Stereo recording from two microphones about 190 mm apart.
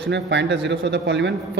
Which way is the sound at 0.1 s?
70° right (ahead or behind).